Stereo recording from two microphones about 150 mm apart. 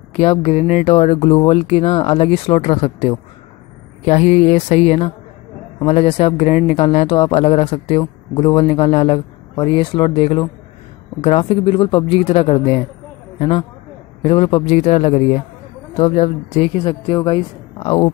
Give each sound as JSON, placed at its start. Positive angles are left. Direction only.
{"t": 0.2, "sound": "speech", "side_deg": 45}
{"t": 2.6, "sound": "speech", "side_deg": 50}
{"t": 8.0, "sound": "speech", "side_deg": 30}